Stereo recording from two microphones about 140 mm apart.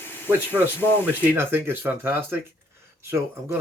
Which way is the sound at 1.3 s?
15° right (ahead or behind).